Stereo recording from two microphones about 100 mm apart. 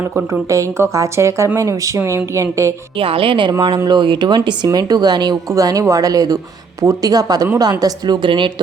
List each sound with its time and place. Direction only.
0.5 s speech: 30° right (ahead or behind)
3.0 s a woman's voice: 65° right (ahead or behind)